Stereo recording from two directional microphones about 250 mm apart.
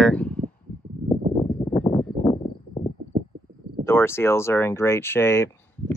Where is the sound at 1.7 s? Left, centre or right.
Centre.